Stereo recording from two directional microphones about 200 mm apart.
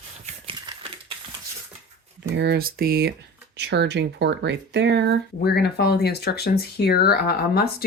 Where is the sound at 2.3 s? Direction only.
55° right (ahead or behind).